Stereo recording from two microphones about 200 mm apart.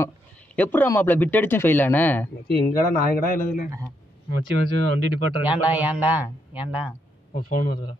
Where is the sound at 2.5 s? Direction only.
45° left (ahead or behind).